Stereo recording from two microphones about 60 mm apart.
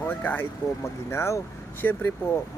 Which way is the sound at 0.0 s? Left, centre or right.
Left.